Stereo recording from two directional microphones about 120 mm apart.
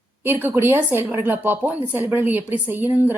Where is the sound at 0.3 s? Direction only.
20° right (ahead or behind).